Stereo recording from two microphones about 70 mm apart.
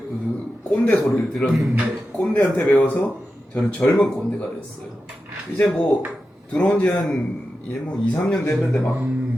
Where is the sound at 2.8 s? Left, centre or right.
Centre.